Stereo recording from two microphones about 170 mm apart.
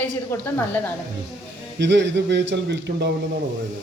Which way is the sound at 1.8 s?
90° right.